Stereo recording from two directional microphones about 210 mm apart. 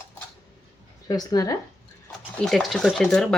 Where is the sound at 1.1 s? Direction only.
20° left (ahead or behind).